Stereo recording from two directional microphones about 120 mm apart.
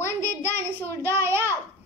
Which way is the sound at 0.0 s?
20° left (ahead or behind).